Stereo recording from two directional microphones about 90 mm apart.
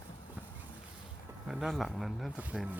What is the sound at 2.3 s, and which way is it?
Speech, 15° right (ahead or behind).